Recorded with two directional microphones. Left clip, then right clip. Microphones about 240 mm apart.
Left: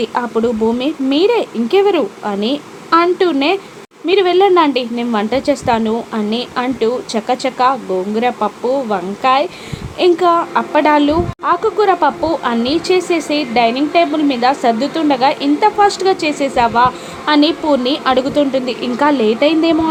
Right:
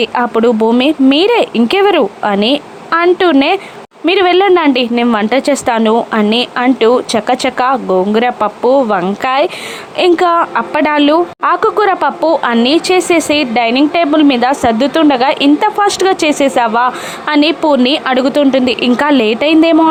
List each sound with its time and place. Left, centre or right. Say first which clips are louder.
0.0 s a woman's voice: right 5 dB; right